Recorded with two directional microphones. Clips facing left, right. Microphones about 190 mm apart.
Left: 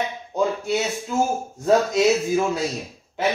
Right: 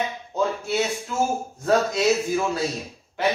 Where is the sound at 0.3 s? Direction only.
15° left (ahead or behind).